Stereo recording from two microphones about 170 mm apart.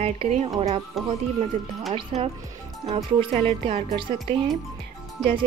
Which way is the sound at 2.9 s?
30° right (ahead or behind).